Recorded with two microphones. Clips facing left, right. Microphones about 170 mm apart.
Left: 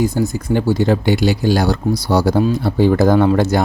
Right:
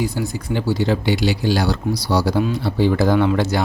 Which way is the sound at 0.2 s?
45° left (ahead or behind).